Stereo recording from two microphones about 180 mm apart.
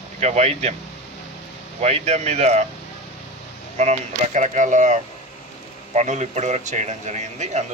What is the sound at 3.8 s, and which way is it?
A man's voice, 40° right (ahead or behind).